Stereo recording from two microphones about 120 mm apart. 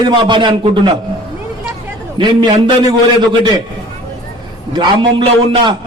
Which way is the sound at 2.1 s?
40° right (ahead or behind).